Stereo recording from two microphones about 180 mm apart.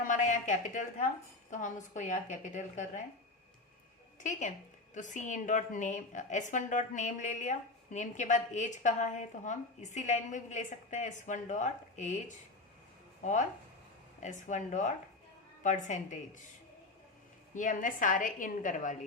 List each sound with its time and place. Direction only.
0.0 s a woman's voice: 45° left (ahead or behind)
4.2 s a woman's voice: 40° left (ahead or behind)
17.5 s a woman's voice: 45° left (ahead or behind)